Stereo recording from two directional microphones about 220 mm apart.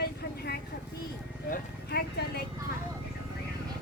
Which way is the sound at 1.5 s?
45° left (ahead or behind).